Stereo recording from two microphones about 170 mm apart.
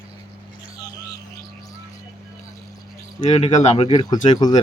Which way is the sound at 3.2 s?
40° left (ahead or behind).